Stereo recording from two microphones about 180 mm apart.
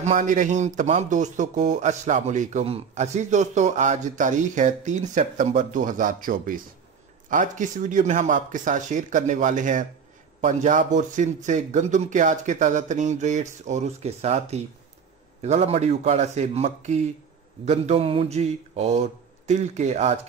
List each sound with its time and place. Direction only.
0.0 s speech: 45° right (ahead or behind)
15.4 s mantra: 40° right (ahead or behind)